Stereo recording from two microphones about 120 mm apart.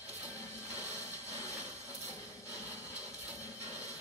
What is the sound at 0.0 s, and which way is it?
Music, 25° left (ahead or behind).